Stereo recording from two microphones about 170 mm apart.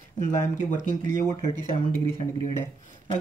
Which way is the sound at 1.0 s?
45° right (ahead or behind).